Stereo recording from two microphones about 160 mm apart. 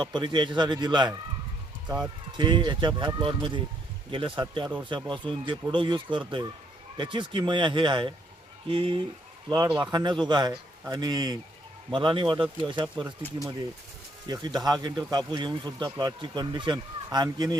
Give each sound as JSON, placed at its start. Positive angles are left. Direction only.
{"t": 0.0, "sound": "speech", "side_deg": -30}
{"t": 2.3, "sound": "speech", "side_deg": -30}
{"t": 14.3, "sound": "speech", "side_deg": -25}